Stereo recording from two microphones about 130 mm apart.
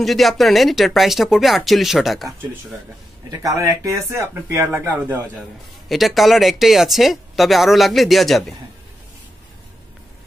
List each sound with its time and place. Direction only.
0.0 s speech: centre (ahead or behind)
3.3 s speech: 25° right (ahead or behind)
5.9 s speech: centre (ahead or behind)